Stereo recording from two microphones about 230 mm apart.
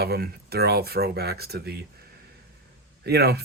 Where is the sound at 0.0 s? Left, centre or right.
Right.